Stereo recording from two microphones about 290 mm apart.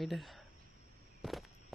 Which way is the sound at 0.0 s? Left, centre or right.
Centre.